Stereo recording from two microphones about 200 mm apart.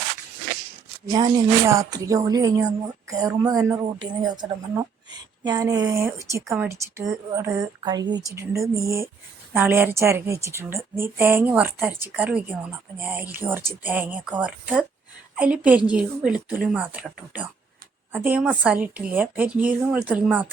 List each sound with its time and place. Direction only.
1.1 s speech: 20° right (ahead or behind)